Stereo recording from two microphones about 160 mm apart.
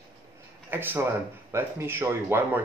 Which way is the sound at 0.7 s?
15° right (ahead or behind).